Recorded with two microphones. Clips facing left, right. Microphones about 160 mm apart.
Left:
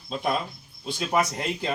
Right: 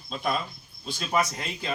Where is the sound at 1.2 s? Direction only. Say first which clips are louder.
Left 2 dB; 25° left (ahead or behind).